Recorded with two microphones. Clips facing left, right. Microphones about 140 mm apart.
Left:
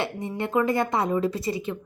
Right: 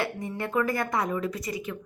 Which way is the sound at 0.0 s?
25° left (ahead or behind).